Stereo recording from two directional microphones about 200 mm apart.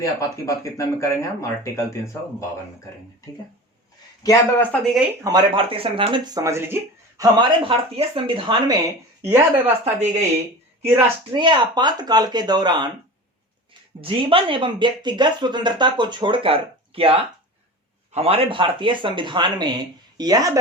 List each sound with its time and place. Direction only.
0.0 s speech: 15° left (ahead or behind)
4.2 s speech: 15° left (ahead or behind)
5.2 s speech: 25° right (ahead or behind)
7.3 s speech: 25° right (ahead or behind)
9.2 s speech: 10° right (ahead or behind)
9.8 s speech: 35° right (ahead or behind)
14.0 s speech: 25° right (ahead or behind)